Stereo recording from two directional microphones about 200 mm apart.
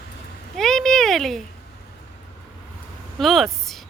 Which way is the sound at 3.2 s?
Centre (ahead or behind).